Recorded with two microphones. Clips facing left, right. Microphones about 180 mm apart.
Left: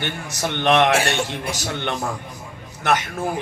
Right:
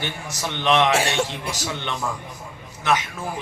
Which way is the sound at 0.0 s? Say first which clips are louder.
Left 3 dB; 60° left (ahead or behind).